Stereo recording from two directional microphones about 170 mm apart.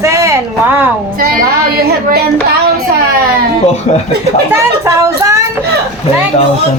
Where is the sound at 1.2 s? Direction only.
55° right (ahead or behind).